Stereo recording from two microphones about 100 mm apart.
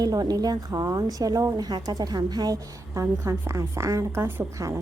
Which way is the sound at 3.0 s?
25° right (ahead or behind).